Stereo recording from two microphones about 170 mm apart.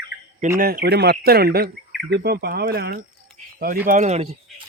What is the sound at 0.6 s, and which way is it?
Speech, 60° right (ahead or behind).